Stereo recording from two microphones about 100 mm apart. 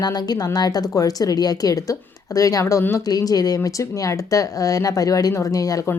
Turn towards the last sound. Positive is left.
turn(degrees=35)  # may be behind; listen again after turning